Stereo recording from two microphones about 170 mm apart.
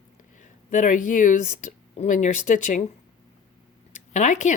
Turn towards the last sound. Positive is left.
turn(degrees=45)  # may be behind; listen again after turning